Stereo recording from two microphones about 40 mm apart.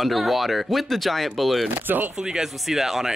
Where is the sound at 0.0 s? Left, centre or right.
Centre.